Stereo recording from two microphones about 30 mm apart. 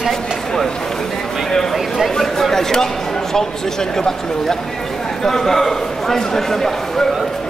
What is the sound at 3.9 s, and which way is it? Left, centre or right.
A man's voice, centre.